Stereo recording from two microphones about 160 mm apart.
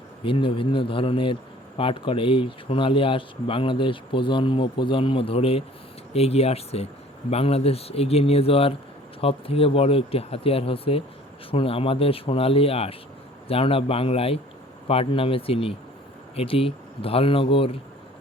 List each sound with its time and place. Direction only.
0.3 s speech: 35° left (ahead or behind)